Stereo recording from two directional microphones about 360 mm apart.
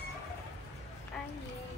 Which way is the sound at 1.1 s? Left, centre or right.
Centre.